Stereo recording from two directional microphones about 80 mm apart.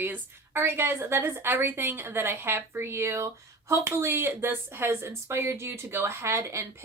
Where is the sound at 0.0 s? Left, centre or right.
Right.